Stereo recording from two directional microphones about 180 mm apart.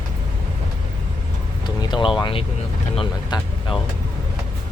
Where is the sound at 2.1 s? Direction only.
25° left (ahead or behind).